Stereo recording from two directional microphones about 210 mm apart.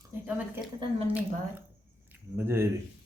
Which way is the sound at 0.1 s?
10° right (ahead or behind).